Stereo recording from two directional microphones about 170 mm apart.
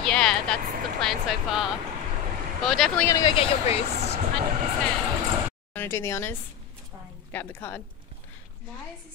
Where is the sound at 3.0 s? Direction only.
20° left (ahead or behind).